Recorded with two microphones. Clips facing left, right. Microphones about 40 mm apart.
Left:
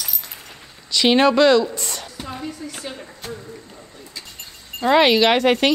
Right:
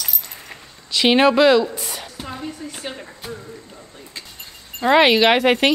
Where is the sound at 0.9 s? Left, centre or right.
Centre.